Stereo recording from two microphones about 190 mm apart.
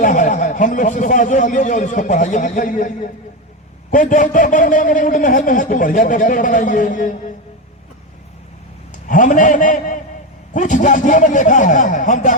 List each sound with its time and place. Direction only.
0.0 s a man's voice: 40° left (ahead or behind)
9.0 s a man's voice: 45° left (ahead or behind)